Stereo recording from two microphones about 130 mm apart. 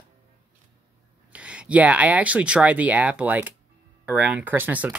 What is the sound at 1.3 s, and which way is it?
Speech, 10° right (ahead or behind).